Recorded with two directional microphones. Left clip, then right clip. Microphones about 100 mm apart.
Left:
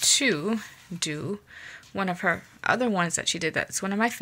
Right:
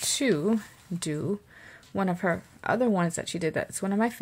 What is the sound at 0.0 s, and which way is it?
Speech, 35° right (ahead or behind).